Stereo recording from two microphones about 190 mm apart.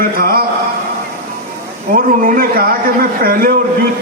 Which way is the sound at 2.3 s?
50° right (ahead or behind).